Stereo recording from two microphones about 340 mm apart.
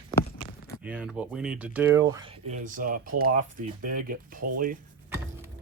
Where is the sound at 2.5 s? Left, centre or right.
Right.